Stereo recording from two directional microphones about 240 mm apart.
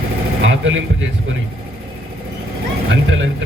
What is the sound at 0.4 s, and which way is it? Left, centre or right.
Speech, right.